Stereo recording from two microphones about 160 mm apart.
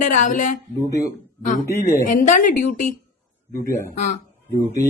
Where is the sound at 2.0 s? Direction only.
50° left (ahead or behind).